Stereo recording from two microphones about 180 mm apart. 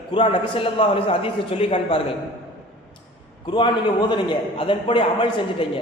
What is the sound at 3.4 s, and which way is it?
A man's voice, 25° left (ahead or behind).